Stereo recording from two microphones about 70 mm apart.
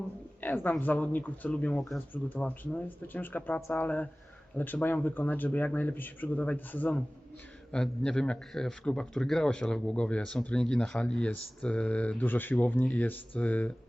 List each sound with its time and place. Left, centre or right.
0.4 s a man's voice: left
7.7 s a man's voice: centre